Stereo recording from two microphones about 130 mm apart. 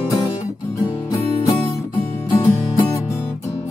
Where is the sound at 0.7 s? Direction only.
25° left (ahead or behind).